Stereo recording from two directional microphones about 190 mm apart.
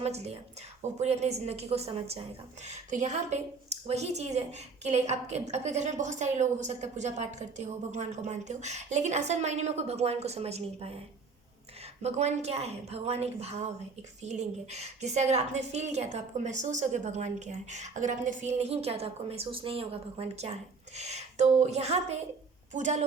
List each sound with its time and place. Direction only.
0.0 s a woman's voice: 35° right (ahead or behind)
12.0 s a woman's voice: 35° right (ahead or behind)